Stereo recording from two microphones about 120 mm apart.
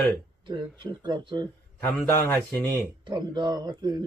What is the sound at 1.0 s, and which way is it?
Speech, 40° right (ahead or behind).